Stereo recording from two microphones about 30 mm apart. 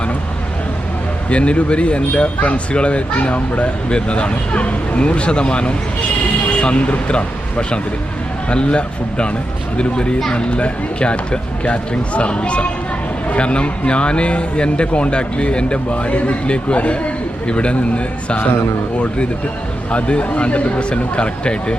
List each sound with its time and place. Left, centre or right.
1.3 s speech: left
3.8 s a man's voice: left
10.3 s a man's voice: left
17.5 s a man's voice: left
19.9 s a man's voice: left